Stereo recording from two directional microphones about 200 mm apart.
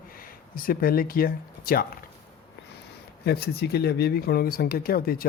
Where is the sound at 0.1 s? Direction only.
45° left (ahead or behind).